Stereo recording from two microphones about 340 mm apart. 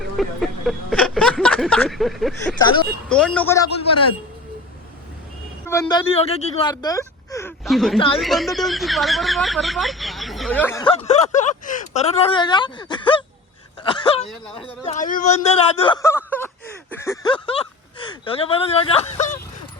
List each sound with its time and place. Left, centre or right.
0.2 s a sound: centre
3.1 s speech: centre
5.6 s speech: centre
7.9 s speech: centre
8.2 s speech: centre